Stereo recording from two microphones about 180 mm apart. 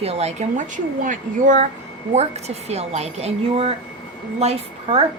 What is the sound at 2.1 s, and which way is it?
Speech, 35° right (ahead or behind).